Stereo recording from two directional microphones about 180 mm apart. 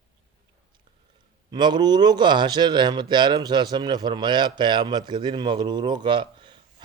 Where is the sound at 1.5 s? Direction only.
25° right (ahead or behind).